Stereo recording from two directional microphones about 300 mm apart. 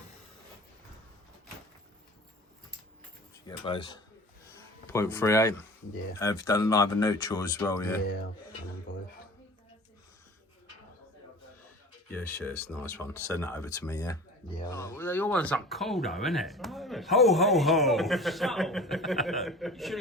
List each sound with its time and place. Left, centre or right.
3.4 s speech: centre
8.9 s a sound: left
12.1 s speech: centre